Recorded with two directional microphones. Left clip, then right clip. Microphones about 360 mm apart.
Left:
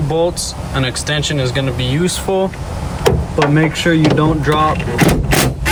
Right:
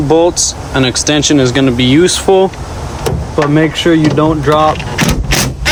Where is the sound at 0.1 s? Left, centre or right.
Centre; by 2.5 s right.